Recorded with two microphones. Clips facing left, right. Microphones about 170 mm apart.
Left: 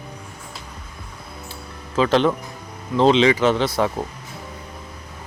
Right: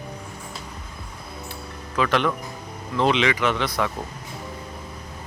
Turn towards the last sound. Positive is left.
turn(degrees=30)  # may be behind; listen again after turning